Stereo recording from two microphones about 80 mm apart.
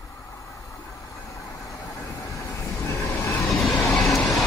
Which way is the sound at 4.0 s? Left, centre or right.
Centre.